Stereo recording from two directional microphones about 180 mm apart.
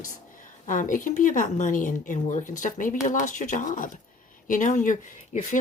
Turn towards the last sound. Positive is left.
turn(degrees=45)  # may be behind; listen again after turning